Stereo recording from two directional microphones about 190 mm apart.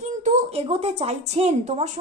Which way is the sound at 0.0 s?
40° right (ahead or behind).